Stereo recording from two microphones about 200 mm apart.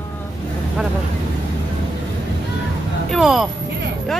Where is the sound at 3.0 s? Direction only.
Centre (ahead or behind).